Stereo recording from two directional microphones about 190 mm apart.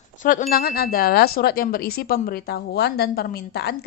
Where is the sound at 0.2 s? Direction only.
40° left (ahead or behind).